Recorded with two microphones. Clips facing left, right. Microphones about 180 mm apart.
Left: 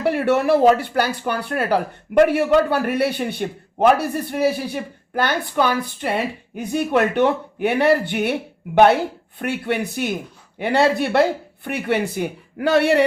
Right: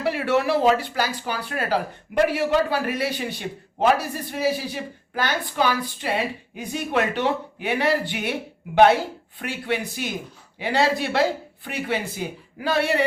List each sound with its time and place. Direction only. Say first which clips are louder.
0.0 s speech: left 4 dB; 55° left (ahead or behind)
9.4 s speech: left 4 dB; 55° left (ahead or behind)